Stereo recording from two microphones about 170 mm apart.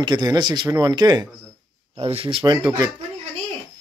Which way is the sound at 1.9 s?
35° right (ahead or behind).